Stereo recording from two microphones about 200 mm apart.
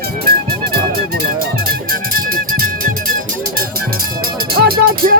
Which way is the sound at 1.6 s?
45° right (ahead or behind).